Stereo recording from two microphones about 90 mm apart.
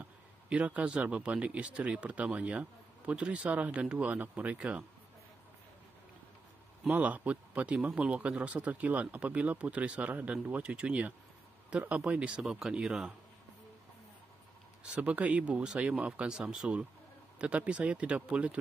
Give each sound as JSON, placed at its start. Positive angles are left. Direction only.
{"t": 0.0, "sound": "a man's voice", "side_deg": -15}
{"t": 6.8, "sound": "a man's voice", "side_deg": -15}
{"t": 14.8, "sound": "a man's voice", "side_deg": -15}